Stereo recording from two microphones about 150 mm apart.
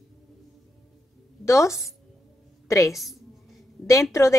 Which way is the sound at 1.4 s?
20° left (ahead or behind).